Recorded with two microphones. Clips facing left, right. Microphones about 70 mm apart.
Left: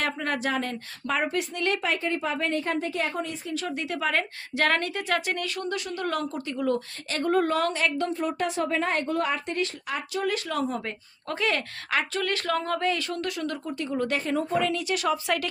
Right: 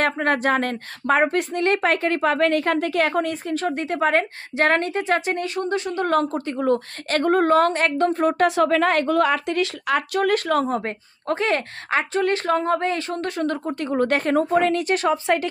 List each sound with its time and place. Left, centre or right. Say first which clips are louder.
0.0 s a woman's voice: right 7 dB; right